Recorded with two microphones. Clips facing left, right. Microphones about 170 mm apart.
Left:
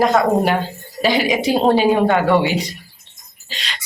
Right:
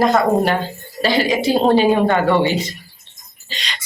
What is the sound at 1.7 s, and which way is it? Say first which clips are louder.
A woman's voice: even; centre (ahead or behind).